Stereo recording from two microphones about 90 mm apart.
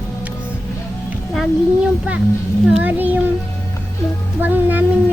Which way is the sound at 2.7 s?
20° right (ahead or behind).